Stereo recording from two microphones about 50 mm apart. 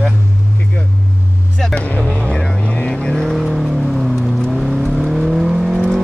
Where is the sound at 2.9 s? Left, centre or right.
Centre.